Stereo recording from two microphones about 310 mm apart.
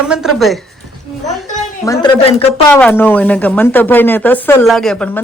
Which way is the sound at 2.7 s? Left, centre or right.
Centre.